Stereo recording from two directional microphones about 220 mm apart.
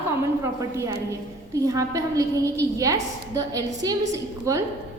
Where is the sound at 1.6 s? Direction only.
15° right (ahead or behind).